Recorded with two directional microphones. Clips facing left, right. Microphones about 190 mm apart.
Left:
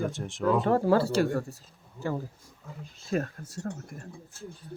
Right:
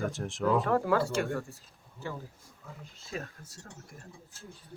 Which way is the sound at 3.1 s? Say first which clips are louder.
Left 10 dB; 55° left (ahead or behind).